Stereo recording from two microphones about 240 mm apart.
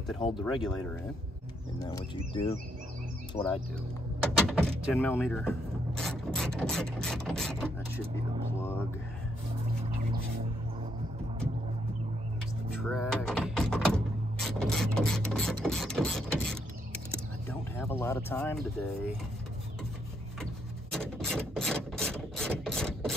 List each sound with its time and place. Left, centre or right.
0.2 s speech: centre
1.8 s speech: centre
4.4 s speech: centre
12.9 s speech: centre
20.9 s a sound: centre